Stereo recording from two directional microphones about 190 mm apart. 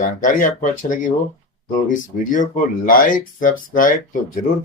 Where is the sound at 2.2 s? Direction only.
45° left (ahead or behind).